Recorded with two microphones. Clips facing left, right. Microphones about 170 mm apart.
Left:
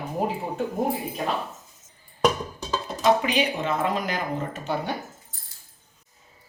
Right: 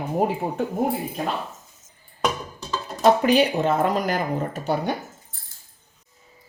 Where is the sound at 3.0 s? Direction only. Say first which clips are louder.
Right 5 dB; 40° right (ahead or behind).